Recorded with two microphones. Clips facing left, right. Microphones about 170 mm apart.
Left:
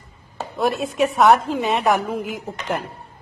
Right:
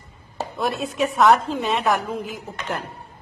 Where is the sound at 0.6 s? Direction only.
Centre (ahead or behind).